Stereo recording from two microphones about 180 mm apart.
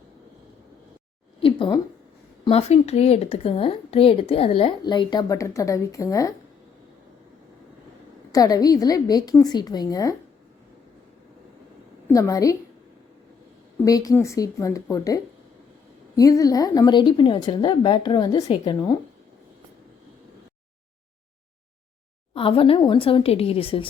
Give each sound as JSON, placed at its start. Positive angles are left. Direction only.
{"t": 1.4, "sound": "a sound", "side_deg": 30}
{"t": 2.4, "sound": "speech", "side_deg": 35}
{"t": 8.3, "sound": "a woman's voice", "side_deg": 20}
{"t": 12.0, "sound": "a woman's voice", "side_deg": 15}
{"t": 13.8, "sound": "a woman's voice", "side_deg": 20}
{"t": 22.4, "sound": "speech", "side_deg": 30}